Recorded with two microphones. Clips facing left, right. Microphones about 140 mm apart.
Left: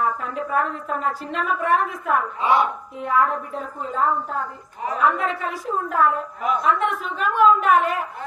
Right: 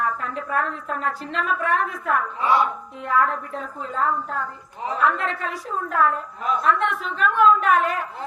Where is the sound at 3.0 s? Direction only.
5° left (ahead or behind).